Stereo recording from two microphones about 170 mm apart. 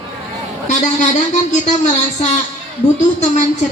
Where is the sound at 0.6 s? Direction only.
45° left (ahead or behind).